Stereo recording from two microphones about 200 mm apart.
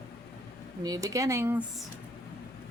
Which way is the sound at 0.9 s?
15° right (ahead or behind).